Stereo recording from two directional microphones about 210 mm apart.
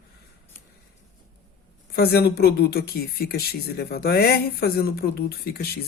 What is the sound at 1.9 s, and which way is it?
Speech, 50° left (ahead or behind).